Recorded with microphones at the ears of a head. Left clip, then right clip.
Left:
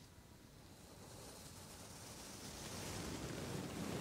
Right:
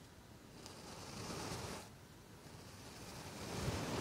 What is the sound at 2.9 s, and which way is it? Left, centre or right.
Pink noise, left.